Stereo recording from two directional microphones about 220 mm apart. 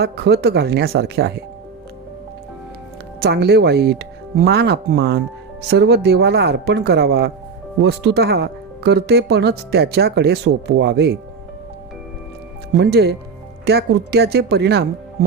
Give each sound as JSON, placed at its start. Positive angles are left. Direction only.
{"t": 0.0, "sound": "speech", "side_deg": -45}
{"t": 3.2, "sound": "speech", "side_deg": -50}
{"t": 12.8, "sound": "speech", "side_deg": -45}